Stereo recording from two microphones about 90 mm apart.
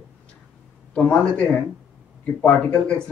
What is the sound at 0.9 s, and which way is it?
Speech, 15° left (ahead or behind).